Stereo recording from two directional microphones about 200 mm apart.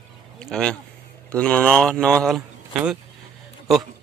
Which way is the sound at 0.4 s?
5° left (ahead or behind).